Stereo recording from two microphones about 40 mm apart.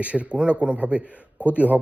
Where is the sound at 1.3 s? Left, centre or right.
Left.